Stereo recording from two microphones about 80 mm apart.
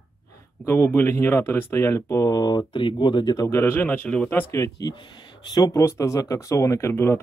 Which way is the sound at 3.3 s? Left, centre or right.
Left.